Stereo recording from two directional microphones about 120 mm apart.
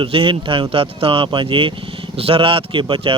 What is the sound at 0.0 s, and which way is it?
Speech, 45° right (ahead or behind).